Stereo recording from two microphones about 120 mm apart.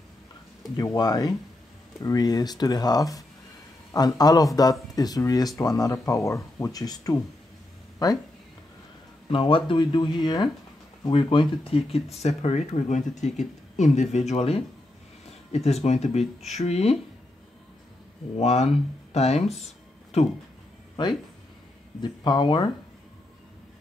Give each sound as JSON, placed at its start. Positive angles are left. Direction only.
{"t": 0.7, "sound": "speech", "side_deg": 30}
{"t": 9.3, "sound": "speech", "side_deg": 45}
{"t": 14.1, "sound": "speech", "side_deg": 65}
{"t": 18.4, "sound": "speech", "side_deg": 65}
{"t": 22.0, "sound": "speech", "side_deg": 40}